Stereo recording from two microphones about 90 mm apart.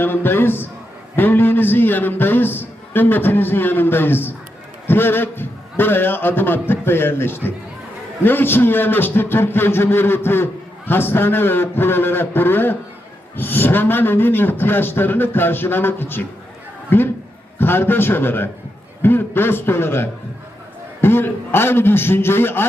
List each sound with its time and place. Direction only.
0.0 s a man's voice: 25° left (ahead or behind)